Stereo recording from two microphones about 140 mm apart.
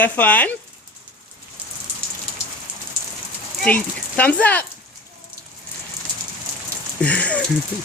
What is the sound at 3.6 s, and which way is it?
Speech, 10° left (ahead or behind).